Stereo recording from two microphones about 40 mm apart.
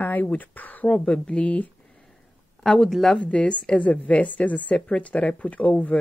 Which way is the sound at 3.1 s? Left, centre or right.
Left.